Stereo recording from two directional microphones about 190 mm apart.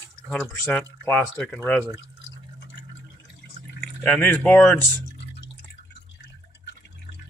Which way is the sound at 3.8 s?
5° left (ahead or behind).